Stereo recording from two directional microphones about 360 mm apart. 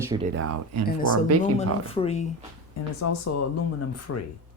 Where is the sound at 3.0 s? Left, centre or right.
Left.